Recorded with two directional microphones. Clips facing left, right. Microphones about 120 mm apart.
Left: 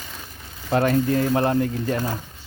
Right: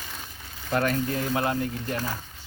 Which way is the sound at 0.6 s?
30° left (ahead or behind).